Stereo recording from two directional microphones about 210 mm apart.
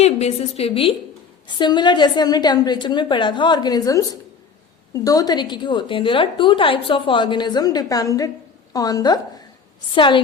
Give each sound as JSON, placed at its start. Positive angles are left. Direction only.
{"t": 0.0, "sound": "a woman's voice", "side_deg": 30}